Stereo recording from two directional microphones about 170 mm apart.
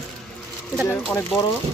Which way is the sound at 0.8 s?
10° left (ahead or behind).